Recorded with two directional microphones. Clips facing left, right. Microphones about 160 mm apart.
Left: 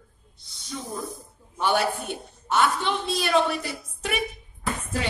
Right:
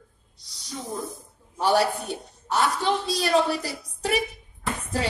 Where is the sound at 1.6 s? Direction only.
35° right (ahead or behind).